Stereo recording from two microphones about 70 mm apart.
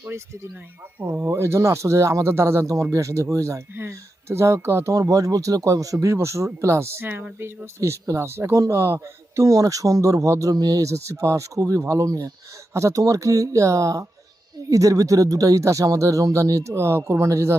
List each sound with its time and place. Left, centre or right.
0.9 s speech: right
1.3 s speech: right
10.5 s speech: right